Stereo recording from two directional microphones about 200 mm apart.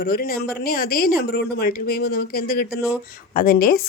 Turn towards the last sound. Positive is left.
turn(degrees=45)  # may be behind; listen again after turning